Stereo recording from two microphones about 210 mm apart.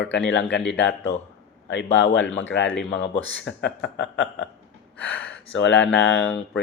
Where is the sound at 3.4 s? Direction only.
55° left (ahead or behind).